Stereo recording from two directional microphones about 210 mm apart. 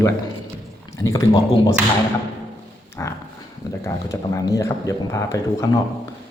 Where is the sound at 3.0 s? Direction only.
15° left (ahead or behind).